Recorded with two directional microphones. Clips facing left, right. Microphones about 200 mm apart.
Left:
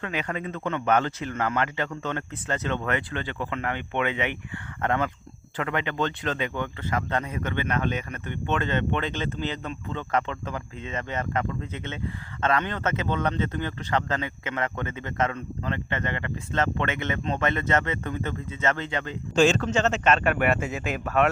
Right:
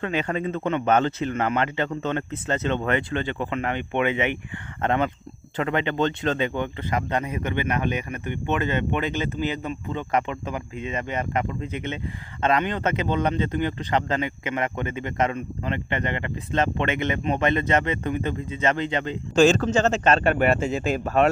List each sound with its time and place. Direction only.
0.0 s speech: 30° right (ahead or behind)
19.4 s speech: 40° right (ahead or behind)